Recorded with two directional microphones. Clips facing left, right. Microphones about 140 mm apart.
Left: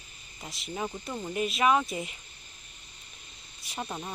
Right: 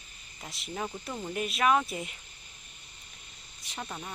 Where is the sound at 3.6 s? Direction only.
15° left (ahead or behind).